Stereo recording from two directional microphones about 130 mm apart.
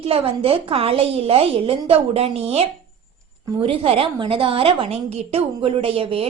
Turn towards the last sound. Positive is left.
turn(degrees=-45)  # may be behind; listen again after turning